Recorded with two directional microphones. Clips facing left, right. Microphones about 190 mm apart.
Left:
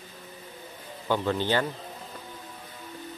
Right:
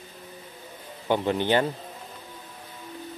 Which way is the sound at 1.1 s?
20° right (ahead or behind).